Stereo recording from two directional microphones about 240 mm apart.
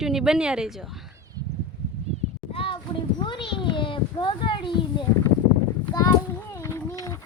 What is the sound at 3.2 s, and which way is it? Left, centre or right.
A child's voice, left.